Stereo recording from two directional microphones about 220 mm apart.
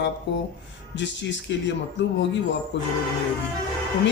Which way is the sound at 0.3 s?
55° left (ahead or behind).